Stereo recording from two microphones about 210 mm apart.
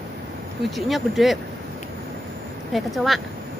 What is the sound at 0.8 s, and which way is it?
Speech, centre (ahead or behind).